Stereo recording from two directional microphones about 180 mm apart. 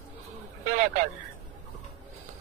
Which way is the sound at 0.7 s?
45° right (ahead or behind).